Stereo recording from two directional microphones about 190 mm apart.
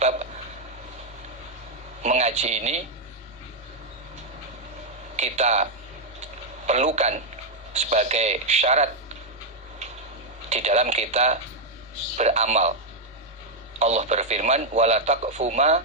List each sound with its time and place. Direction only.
0.0 s hiccup: 35° right (ahead or behind)
2.0 s a man's voice: 35° right (ahead or behind)
5.1 s a man's voice: 35° right (ahead or behind)
6.7 s a man's voice: 35° right (ahead or behind)
10.5 s a man's voice: 35° right (ahead or behind)
13.7 s a man's voice: 35° right (ahead or behind)